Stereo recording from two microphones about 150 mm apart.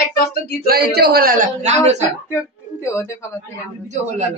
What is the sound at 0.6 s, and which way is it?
Speech, 90° right.